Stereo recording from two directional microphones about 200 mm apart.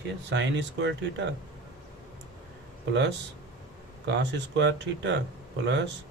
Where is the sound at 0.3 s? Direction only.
60° right (ahead or behind).